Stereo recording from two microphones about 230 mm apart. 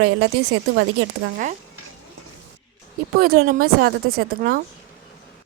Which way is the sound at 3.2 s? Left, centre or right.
Right.